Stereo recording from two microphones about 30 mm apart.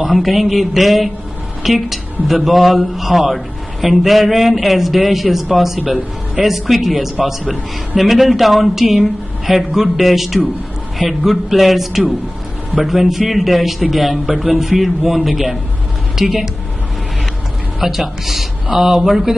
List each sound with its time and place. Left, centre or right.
0.1 s a man's voice: centre
17.7 s speech: centre